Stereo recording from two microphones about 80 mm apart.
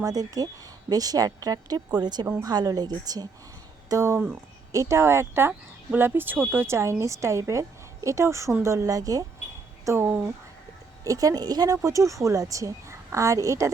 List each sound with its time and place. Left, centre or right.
0.0 s a woman's voice: right
3.8 s speech: right
9.8 s speech: right
11.0 s speech: right